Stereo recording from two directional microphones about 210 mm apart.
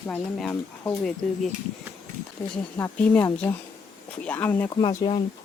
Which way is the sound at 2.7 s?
10° left (ahead or behind).